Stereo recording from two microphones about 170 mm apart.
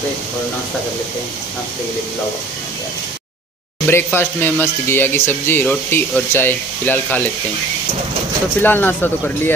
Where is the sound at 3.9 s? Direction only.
15° left (ahead or behind).